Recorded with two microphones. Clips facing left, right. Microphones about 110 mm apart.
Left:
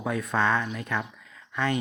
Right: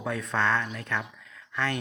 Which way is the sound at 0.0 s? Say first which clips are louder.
Left 2 dB; 10° left (ahead or behind).